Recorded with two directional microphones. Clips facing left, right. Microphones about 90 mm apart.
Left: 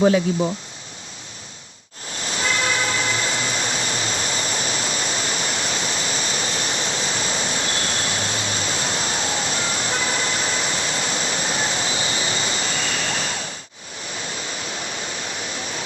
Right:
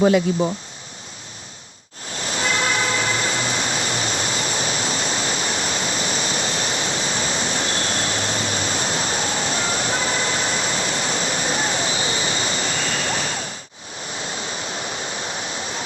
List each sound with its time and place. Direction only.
2.2 s train: 35° right (ahead or behind)
4.4 s waterfall: 35° right (ahead or behind)